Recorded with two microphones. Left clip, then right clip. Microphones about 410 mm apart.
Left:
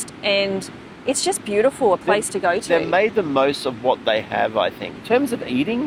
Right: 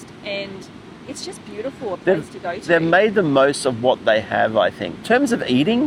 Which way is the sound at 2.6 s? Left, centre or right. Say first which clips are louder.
Right 7 dB; right.